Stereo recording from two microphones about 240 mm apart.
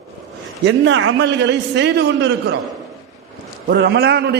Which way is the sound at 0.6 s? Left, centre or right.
Right.